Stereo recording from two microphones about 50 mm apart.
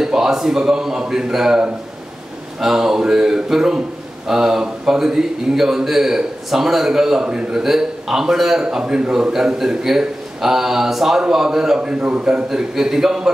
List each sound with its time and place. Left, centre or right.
0.0 s a man's voice: centre
2.6 s a man's voice: centre
9.3 s a man's voice: centre